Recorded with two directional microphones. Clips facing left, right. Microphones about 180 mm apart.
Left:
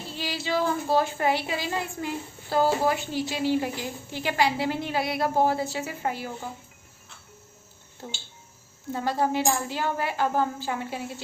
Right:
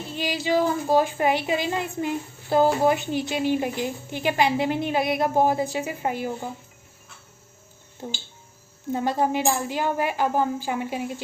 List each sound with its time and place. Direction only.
0.1 s a woman's voice: 15° right (ahead or behind)
8.0 s speech: 15° right (ahead or behind)